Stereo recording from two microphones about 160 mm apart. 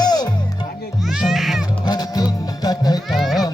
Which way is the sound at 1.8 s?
25° left (ahead or behind).